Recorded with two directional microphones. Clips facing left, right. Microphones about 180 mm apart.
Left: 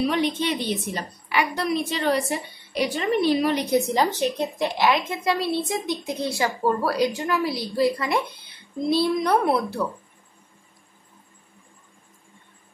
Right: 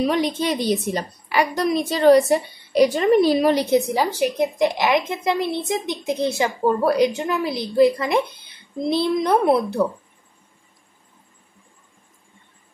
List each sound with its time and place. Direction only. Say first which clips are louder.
0.0 s a woman's voice: right 2 dB; 40° right (ahead or behind)
3.7 s a woman's voice: right 2 dB; 10° right (ahead or behind); by 9.9 s 30° right (ahead or behind)